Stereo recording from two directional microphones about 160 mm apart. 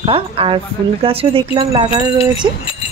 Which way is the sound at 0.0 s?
35° right (ahead or behind).